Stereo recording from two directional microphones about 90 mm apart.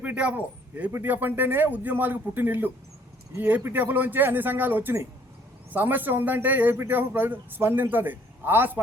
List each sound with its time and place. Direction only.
0.0 s a man's voice: 15° right (ahead or behind)